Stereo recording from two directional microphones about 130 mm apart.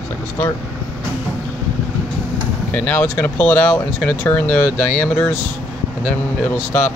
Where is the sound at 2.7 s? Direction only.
15° left (ahead or behind).